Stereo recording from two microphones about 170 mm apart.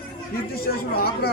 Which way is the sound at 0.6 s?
65° left (ahead or behind).